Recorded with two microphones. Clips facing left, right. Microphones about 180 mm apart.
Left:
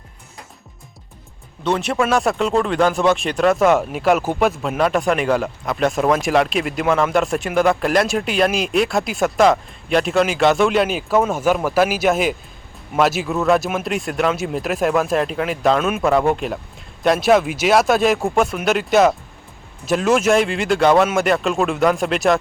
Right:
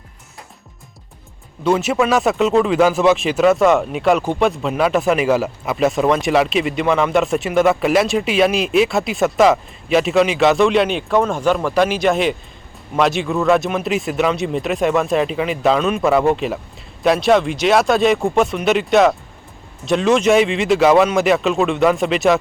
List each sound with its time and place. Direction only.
1.6 s speech: 5° right (ahead or behind)